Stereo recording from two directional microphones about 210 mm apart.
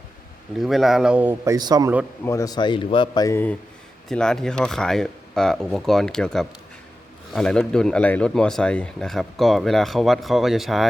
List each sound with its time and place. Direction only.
0.6 s speech: centre (ahead or behind); by 2.0 s 15° right (ahead or behind)
2.2 s speech: 15° left (ahead or behind); by 10.8 s centre (ahead or behind)